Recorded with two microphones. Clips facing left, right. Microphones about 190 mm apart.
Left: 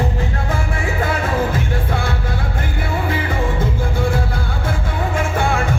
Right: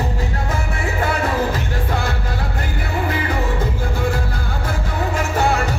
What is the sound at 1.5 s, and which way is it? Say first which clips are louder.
Music: left 1 dB; 50° left (ahead or behind).